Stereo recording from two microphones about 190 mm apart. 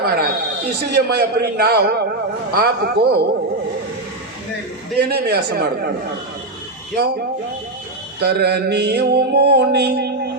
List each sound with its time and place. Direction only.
0.0 s a man's voice: 55° right (ahead or behind)
2.5 s mantra: 55° right (ahead or behind)
4.9 s mantra: 55° right (ahead or behind)
8.2 s mantra: 55° right (ahead or behind)